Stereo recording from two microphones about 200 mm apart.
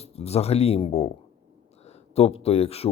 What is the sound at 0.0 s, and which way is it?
Speech, 30° left (ahead or behind).